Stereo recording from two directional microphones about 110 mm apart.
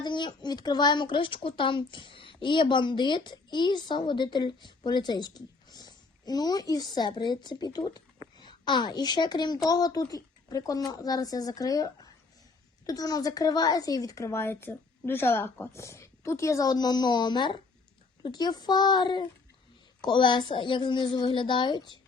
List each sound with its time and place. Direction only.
0.0 s a woman's voice: 45° left (ahead or behind)